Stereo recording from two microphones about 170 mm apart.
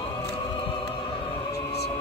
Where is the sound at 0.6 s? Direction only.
30° left (ahead or behind).